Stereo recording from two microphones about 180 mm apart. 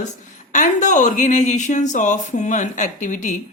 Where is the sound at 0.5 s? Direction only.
45° left (ahead or behind).